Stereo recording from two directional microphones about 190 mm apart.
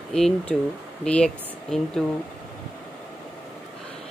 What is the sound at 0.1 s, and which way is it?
Speech, 5° left (ahead or behind).